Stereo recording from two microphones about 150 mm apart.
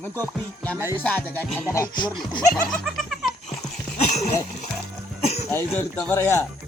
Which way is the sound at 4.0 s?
45° left (ahead or behind).